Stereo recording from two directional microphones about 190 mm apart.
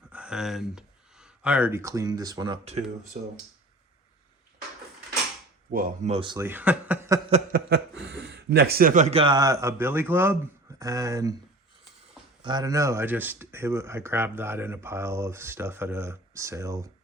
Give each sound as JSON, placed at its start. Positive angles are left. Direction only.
{"t": 0.1, "sound": "speech", "side_deg": -5}
{"t": 3.1, "sound": "speech", "side_deg": -40}
{"t": 5.7, "sound": "speech", "side_deg": -45}
{"t": 6.4, "sound": "speech", "side_deg": -10}
{"t": 7.5, "sound": "speech", "side_deg": -65}
{"t": 12.4, "sound": "speech", "side_deg": -20}